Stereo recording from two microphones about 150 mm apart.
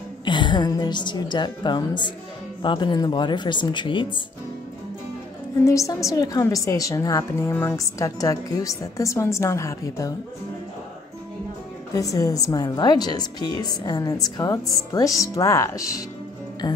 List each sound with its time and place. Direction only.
0.2 s a woman's voice: 30° left (ahead or behind)
5.6 s a woman's voice: 20° left (ahead or behind)
11.9 s a woman's voice: 20° left (ahead or behind)